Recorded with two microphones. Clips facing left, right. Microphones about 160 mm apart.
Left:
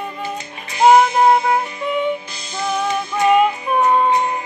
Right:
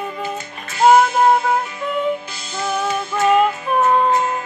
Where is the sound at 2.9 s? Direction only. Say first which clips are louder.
Left 1 dB; 15° left (ahead or behind).